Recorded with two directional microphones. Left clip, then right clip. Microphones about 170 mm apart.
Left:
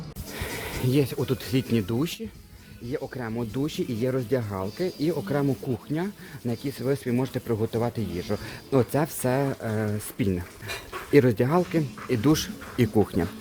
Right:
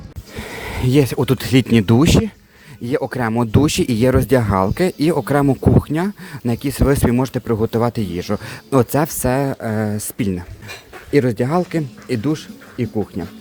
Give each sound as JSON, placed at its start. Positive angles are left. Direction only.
{"t": 0.3, "sound": "speech", "side_deg": -30}
{"t": 12.2, "sound": "speech", "side_deg": -5}